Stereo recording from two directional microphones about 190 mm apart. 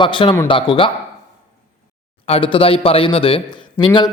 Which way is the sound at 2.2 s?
30° left (ahead or behind).